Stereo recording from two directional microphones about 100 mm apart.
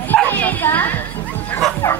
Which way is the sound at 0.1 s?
15° left (ahead or behind).